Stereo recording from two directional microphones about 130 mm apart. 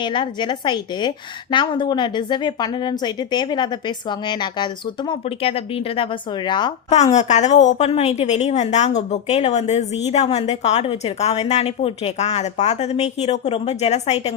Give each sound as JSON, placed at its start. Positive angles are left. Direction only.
{"t": 0.0, "sound": "a woman's voice", "side_deg": 35}
{"t": 6.5, "sound": "a woman's voice", "side_deg": 35}
{"t": 7.1, "sound": "a woman's voice", "side_deg": 60}